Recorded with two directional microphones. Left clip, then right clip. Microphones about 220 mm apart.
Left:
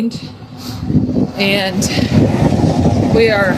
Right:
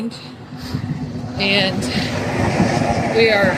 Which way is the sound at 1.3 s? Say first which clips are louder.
Even; 30° left (ahead or behind).